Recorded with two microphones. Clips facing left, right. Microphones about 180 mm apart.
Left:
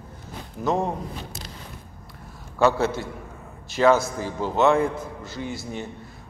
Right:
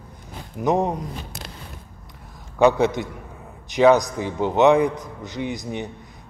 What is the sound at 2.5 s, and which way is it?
A man's voice, 15° right (ahead or behind).